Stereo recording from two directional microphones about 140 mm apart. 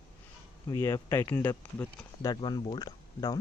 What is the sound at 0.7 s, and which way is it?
Speech, 25° left (ahead or behind).